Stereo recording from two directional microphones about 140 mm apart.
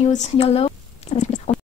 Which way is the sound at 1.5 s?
50° left (ahead or behind).